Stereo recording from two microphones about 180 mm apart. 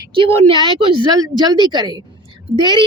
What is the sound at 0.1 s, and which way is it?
A woman's voice, 30° right (ahead or behind).